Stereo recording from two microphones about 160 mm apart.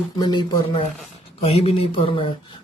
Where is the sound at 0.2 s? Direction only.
25° left (ahead or behind).